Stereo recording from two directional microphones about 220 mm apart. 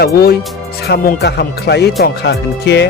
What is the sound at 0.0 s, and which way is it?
Speech, 45° left (ahead or behind).